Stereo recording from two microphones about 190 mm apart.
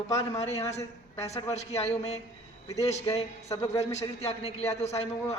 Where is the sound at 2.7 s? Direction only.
15° left (ahead or behind).